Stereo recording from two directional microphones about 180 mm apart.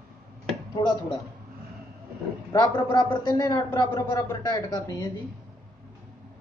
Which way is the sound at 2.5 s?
20° left (ahead or behind).